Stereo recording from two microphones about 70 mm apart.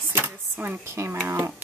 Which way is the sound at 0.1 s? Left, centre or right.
Right.